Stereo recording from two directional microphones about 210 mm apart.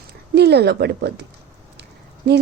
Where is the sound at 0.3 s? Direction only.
50° right (ahead or behind).